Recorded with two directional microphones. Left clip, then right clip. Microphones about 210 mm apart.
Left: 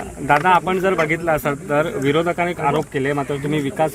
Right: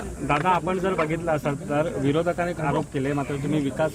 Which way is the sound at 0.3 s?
40° left (ahead or behind).